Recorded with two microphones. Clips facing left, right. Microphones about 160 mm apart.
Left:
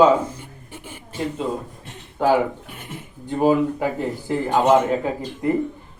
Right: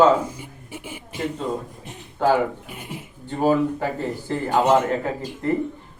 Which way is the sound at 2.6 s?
10° right (ahead or behind).